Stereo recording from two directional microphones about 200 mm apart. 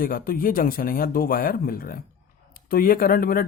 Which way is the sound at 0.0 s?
45° left (ahead or behind).